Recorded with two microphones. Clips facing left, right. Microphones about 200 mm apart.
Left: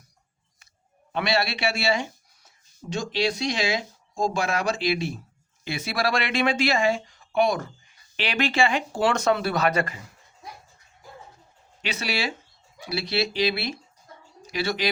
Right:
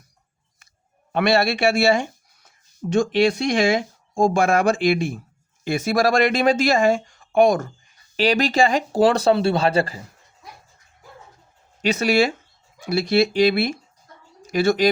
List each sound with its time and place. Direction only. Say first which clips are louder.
1.1 s speech: right 7 dB; 50° right (ahead or behind); by 10.1 s 35° right (ahead or behind)
11.8 s speech: right 11 dB; 45° right (ahead or behind)